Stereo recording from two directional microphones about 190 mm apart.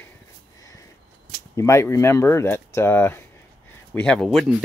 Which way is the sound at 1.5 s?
15° left (ahead or behind).